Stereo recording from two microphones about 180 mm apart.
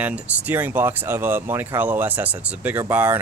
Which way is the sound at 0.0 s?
10° right (ahead or behind).